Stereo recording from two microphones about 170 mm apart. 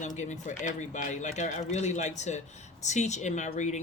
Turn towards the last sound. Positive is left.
turn(degrees=45)  # may be behind; listen again after turning